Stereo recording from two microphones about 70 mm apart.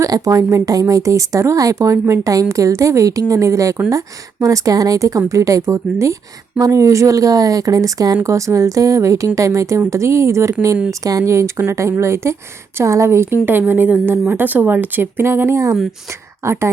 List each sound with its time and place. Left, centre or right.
0.0 s a woman's voice: right